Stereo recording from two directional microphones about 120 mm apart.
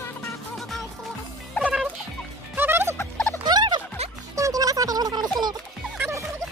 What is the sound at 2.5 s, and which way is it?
Music, 20° right (ahead or behind).